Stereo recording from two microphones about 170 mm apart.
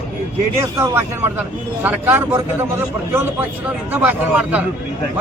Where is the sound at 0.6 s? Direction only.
15° right (ahead or behind).